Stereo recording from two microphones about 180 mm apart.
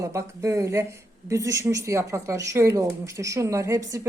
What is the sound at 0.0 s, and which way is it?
Speech, 15° right (ahead or behind).